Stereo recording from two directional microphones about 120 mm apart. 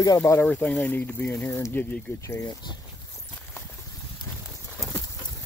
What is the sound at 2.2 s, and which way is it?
Speech, 25° left (ahead or behind).